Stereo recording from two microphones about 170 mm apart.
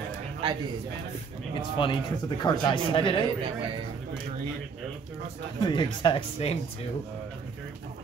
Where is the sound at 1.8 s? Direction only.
30° left (ahead or behind).